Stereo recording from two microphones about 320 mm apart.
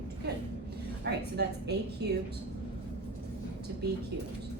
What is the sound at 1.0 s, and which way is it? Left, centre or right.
A woman's voice, right.